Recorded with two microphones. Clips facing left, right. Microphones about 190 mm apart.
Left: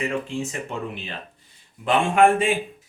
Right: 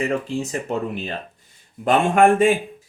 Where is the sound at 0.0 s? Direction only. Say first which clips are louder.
Right 3 dB; 35° right (ahead or behind).